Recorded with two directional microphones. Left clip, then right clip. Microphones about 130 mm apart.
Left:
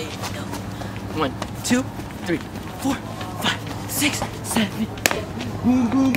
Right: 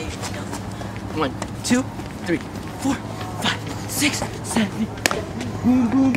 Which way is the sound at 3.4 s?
5° right (ahead or behind).